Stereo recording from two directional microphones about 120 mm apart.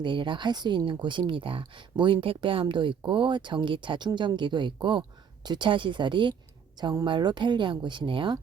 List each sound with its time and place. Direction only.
0.0 s speech: 40° right (ahead or behind)